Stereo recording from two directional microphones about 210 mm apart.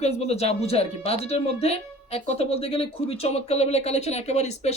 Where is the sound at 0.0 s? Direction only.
30° left (ahead or behind).